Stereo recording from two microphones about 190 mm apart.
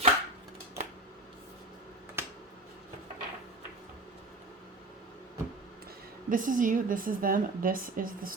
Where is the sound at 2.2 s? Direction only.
10° right (ahead or behind).